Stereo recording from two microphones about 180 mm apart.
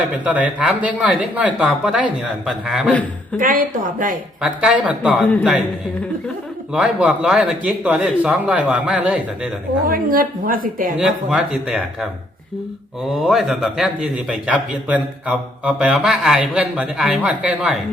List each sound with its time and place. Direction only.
0.3 s a man's voice: 10° right (ahead or behind)
3.3 s a woman's voice: 50° right (ahead or behind)
4.4 s a man's voice: 5° right (ahead or behind)
6.7 s a man's voice: 5° right (ahead or behind)
9.8 s a woman's voice: 50° right (ahead or behind)
10.9 s a man's voice: 5° right (ahead or behind)
13.1 s a man's voice: centre (ahead or behind)